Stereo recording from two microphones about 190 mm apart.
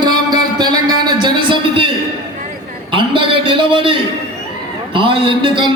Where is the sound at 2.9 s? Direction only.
25° right (ahead or behind).